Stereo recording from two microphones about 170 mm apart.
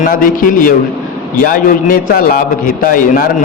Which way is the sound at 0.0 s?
55° left (ahead or behind).